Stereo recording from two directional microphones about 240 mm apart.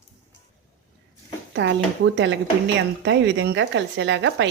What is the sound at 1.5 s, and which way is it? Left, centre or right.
Speech, right.